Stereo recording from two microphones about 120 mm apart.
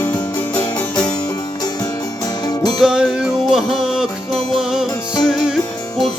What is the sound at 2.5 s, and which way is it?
Music, 35° left (ahead or behind).